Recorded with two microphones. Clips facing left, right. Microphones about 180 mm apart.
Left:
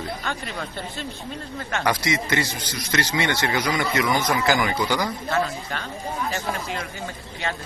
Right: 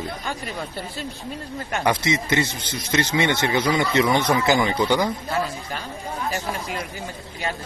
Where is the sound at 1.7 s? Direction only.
20° right (ahead or behind).